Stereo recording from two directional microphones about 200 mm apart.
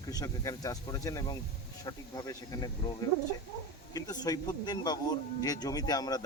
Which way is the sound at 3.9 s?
20° left (ahead or behind).